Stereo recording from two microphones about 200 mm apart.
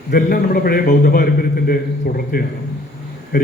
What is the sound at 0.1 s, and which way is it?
A man's voice, 50° left (ahead or behind).